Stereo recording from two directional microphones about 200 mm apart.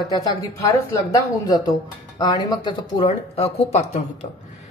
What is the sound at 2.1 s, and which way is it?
Speech, 20° left (ahead or behind).